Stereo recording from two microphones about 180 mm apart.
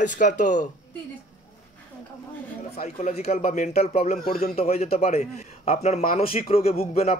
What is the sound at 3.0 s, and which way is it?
A man's voice, 35° left (ahead or behind).